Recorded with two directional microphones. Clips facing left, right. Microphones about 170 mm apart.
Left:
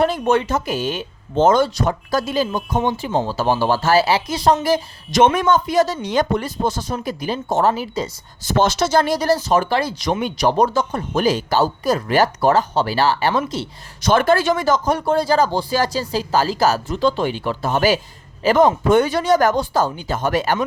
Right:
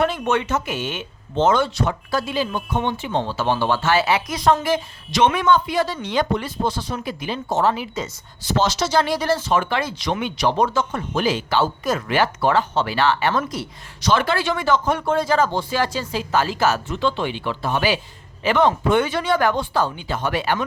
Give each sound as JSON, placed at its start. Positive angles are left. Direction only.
{"t": 0.0, "sound": "speech", "side_deg": 35}
{"t": 4.6, "sound": "speech", "side_deg": 40}
{"t": 8.4, "sound": "speech", "side_deg": 55}
{"t": 13.5, "sound": "speech", "side_deg": 25}
{"t": 14.0, "sound": "speech", "side_deg": 50}